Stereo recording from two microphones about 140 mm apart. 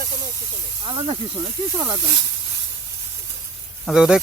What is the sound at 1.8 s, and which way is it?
Speech, 15° right (ahead or behind).